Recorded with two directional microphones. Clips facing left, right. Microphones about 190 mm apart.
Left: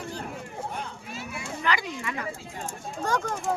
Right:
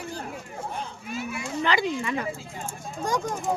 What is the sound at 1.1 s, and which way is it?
Speech, 30° left (ahead or behind).